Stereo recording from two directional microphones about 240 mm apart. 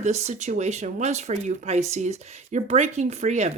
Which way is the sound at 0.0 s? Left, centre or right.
Right.